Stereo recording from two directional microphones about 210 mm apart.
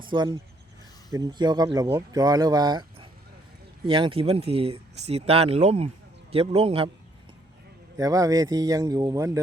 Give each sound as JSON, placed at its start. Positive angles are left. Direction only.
{"t": 0.0, "sound": "speech", "side_deg": -20}
{"t": 7.9, "sound": "speech", "side_deg": -15}